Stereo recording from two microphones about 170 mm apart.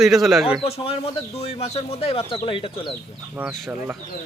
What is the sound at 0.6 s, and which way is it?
Speech, 35° left (ahead or behind).